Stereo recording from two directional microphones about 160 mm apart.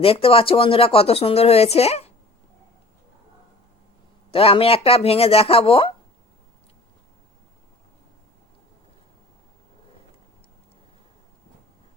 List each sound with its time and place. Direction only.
0.0 s speech: 35° left (ahead or behind)
4.3 s speech: 35° left (ahead or behind)